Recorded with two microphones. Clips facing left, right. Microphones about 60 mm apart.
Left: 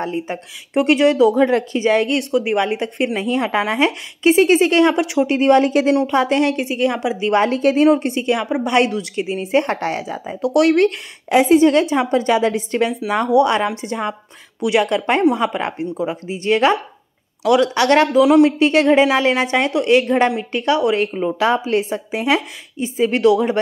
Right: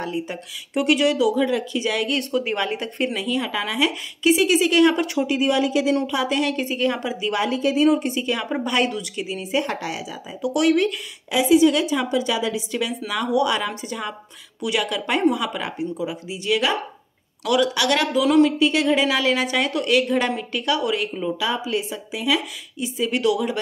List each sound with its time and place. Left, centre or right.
0.0 s a woman's voice: left
2.3 s a woman's voice: left
3.2 s a woman's voice: left
6.0 s a woman's voice: left
7.2 s a woman's voice: left
7.9 s a woman's voice: left
11.2 s a woman's voice: left
18.6 s a woman's voice: left
21.3 s a woman's voice: left